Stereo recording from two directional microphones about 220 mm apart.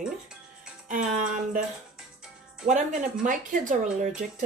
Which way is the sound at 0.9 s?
35° right (ahead or behind).